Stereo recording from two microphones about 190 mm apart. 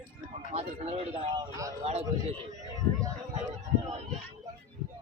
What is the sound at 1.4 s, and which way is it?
Speech, 20° right (ahead or behind).